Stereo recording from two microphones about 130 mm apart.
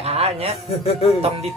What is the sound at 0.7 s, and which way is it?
Speech, 50° left (ahead or behind).